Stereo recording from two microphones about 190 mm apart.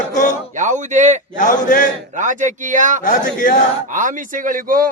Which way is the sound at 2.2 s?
40° right (ahead or behind).